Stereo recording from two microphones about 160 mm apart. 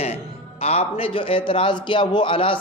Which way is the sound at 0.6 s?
40° left (ahead or behind).